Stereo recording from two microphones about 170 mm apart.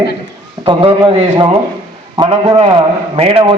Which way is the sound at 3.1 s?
35° right (ahead or behind).